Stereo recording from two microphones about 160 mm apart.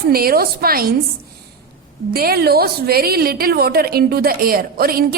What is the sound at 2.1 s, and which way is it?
A woman's voice, 70° right (ahead or behind).